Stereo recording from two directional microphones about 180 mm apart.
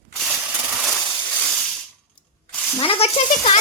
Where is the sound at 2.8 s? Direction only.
30° left (ahead or behind).